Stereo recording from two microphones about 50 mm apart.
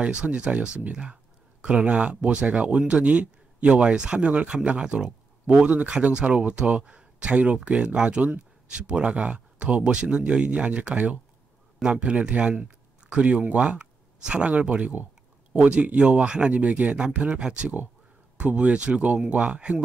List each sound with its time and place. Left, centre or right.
0.0 s speech: right
5.7 s speech: right